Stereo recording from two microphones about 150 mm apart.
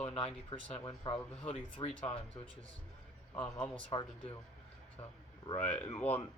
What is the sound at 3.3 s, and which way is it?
Speech, 10° left (ahead or behind).